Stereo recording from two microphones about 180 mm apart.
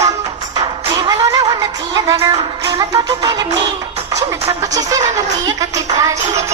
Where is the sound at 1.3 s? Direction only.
20° right (ahead or behind).